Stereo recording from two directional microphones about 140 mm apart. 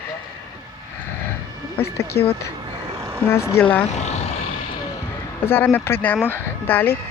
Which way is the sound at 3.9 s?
55° left (ahead or behind).